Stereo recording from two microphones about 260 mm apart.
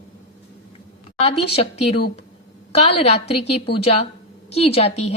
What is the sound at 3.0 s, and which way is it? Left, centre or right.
Speech, left.